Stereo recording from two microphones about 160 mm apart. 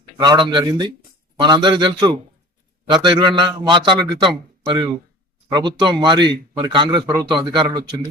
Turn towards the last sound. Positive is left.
turn(degrees=-25)  # may be behind; listen again after turning